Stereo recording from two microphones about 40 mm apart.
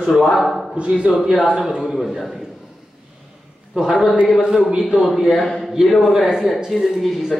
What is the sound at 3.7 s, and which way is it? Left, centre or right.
A man's voice, centre.